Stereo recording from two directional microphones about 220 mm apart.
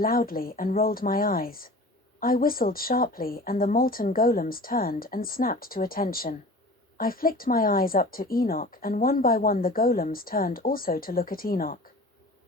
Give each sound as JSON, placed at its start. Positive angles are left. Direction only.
{"t": 0.0, "sound": "speech", "side_deg": 40}